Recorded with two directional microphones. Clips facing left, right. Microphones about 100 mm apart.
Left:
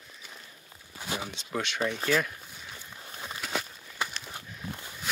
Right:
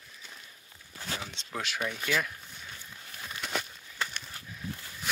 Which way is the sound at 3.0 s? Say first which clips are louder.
Left 4 dB; 30° left (ahead or behind).